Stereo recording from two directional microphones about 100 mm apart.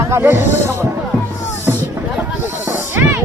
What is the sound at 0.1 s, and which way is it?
Speech, 25° right (ahead or behind).